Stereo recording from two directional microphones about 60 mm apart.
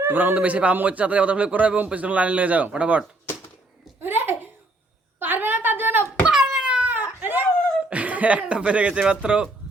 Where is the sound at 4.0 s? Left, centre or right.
Right.